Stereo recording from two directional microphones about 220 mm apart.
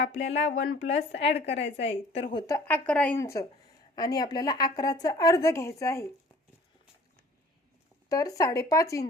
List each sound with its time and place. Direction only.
0.3 s a woman's voice: 55° left (ahead or behind)
2.1 s speech: 25° left (ahead or behind)
2.5 s a woman's voice: 10° left (ahead or behind)
3.9 s a woman's voice: 15° left (ahead or behind)
8.1 s a woman's voice: 15° left (ahead or behind)